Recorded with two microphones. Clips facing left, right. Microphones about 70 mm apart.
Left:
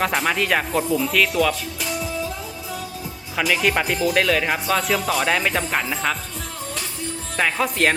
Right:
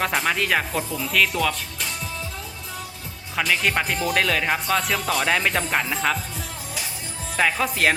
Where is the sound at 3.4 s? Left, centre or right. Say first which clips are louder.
Left 2 dB; centre.